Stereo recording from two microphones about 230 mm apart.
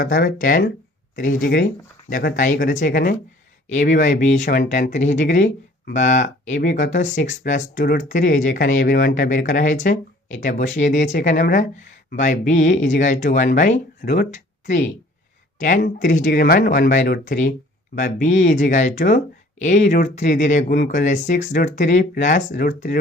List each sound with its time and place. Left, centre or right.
0.0 s speech: left